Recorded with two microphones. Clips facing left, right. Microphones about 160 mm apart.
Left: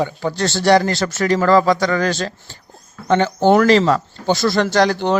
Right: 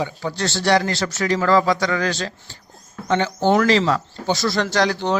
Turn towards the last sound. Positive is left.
turn(degrees=55)  # may be behind; listen again after turning